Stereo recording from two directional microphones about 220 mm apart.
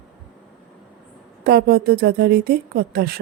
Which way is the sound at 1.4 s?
45° right (ahead or behind).